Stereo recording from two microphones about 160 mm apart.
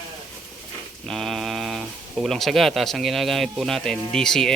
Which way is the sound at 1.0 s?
Centre (ahead or behind).